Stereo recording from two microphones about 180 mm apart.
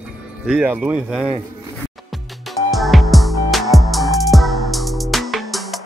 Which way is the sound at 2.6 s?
Centre (ahead or behind).